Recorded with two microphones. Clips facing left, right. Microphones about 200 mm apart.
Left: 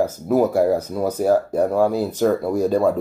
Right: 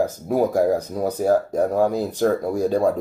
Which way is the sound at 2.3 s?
10° right (ahead or behind).